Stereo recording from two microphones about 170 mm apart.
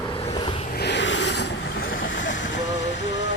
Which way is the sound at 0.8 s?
85° left.